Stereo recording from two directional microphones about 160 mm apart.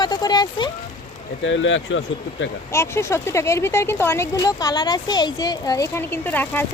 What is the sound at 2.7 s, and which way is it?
Speech, 15° left (ahead or behind).